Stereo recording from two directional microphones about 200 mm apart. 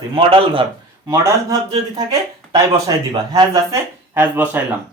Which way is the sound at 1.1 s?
15° right (ahead or behind).